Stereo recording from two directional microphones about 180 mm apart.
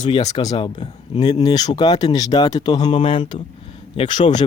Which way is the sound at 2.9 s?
40° left (ahead or behind).